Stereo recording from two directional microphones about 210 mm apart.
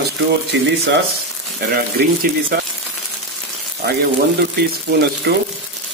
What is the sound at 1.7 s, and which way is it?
Speech, 45° right (ahead or behind).